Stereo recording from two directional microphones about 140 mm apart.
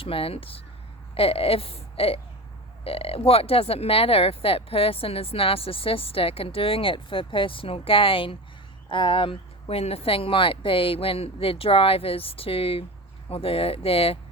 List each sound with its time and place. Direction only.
0.0 s speech: 40° left (ahead or behind)